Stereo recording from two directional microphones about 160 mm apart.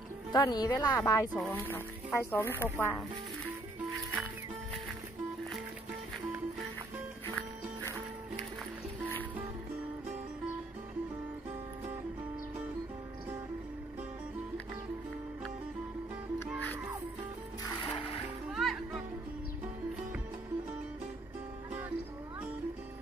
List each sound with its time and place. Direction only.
0.3 s speech: 25° left (ahead or behind)
1.3 s speech: 10° left (ahead or behind)
7.2 s music: 10° left (ahead or behind)
18.5 s music: centre (ahead or behind)